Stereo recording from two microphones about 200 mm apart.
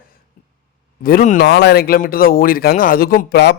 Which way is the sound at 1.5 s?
55° left (ahead or behind).